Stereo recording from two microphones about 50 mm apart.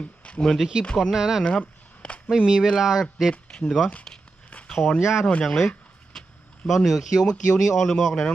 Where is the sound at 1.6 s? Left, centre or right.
Left.